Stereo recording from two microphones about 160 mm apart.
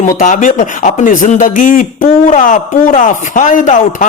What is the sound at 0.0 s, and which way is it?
Speech, 50° left (ahead or behind).